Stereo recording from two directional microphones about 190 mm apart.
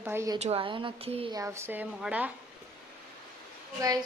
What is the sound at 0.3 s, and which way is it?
A woman's voice, 35° right (ahead or behind).